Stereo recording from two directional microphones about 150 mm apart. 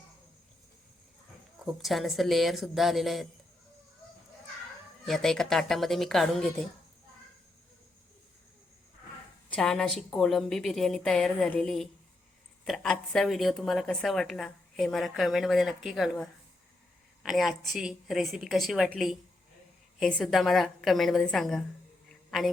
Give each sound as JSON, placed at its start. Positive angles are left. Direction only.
{"t": 1.6, "sound": "a woman's voice", "side_deg": 0}
{"t": 5.0, "sound": "a woman's voice", "side_deg": 0}
{"t": 9.5, "sound": "a woman's voice", "side_deg": 5}
{"t": 17.2, "sound": "a woman's voice", "side_deg": 0}
{"t": 22.1, "sound": "a sound", "side_deg": 0}